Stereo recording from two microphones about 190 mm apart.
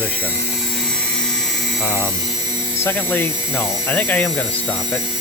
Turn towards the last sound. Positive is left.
turn(degrees=10)  # may be behind; listen again after turning